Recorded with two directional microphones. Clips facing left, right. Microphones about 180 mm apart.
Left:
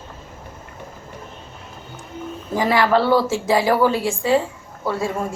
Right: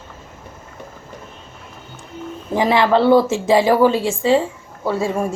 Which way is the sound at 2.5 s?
20° right (ahead or behind).